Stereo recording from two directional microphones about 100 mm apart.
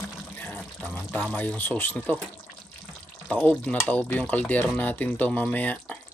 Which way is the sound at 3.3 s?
15° left (ahead or behind).